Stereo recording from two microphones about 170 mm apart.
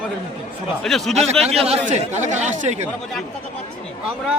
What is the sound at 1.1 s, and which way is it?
Speech, 40° right (ahead or behind).